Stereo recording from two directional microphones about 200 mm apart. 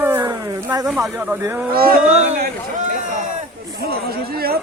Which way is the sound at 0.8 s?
Centre (ahead or behind).